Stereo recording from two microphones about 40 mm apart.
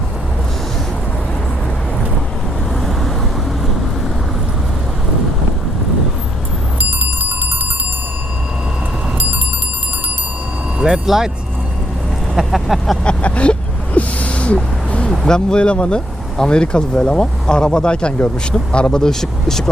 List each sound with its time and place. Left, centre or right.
7.0 s music: right
10.8 s music: centre
11.0 s speech: centre
12.3 s speech: centre
13.1 s owl: left
15.3 s speech: left